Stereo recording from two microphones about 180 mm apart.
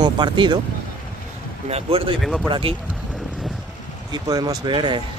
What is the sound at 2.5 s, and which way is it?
Speech, 30° right (ahead or behind).